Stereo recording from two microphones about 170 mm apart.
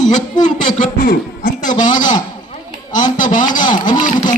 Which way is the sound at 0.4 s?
50° left (ahead or behind).